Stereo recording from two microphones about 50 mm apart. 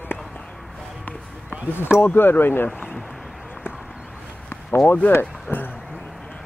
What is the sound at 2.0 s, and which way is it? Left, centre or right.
Speech, left.